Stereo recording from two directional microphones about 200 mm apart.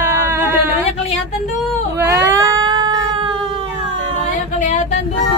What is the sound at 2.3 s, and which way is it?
Cat, 20° right (ahead or behind).